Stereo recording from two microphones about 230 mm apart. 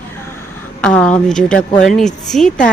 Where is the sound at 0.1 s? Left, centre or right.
Centre.